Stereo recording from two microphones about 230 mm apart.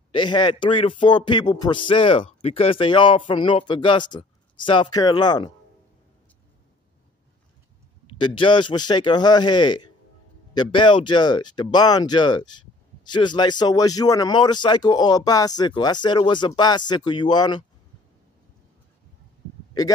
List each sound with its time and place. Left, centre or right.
0.1 s speech: centre
8.2 s speech: left